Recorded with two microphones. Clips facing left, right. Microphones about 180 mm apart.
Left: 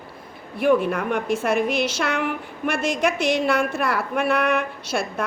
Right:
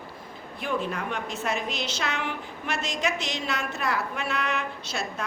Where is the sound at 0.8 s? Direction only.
55° left (ahead or behind).